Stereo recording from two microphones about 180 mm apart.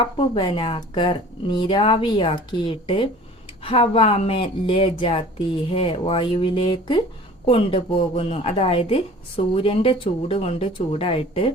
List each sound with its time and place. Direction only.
0.0 s a woman's voice: 25° left (ahead or behind)